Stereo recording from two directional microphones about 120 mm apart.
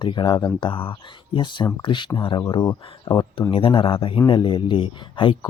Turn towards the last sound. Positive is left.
turn(degrees=45)  # may be behind; listen again after turning